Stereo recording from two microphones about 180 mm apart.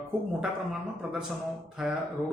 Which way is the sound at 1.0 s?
5° right (ahead or behind).